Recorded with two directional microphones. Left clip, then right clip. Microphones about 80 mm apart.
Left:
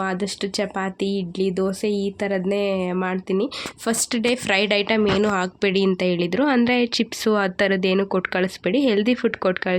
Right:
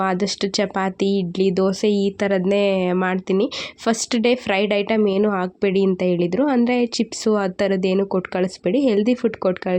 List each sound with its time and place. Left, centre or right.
0.0 s speech: right
5.2 s speech: centre